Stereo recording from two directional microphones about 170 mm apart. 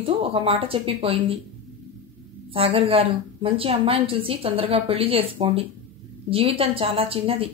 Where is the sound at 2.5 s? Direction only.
35° right (ahead or behind).